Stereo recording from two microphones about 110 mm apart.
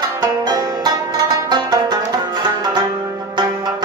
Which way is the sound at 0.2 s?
35° right (ahead or behind).